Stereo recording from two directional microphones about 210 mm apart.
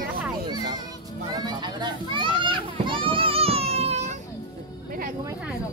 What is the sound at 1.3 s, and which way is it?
Children playing, 20° right (ahead or behind).